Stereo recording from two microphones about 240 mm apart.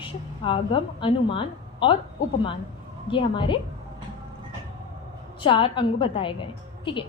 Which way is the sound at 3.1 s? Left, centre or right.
Left.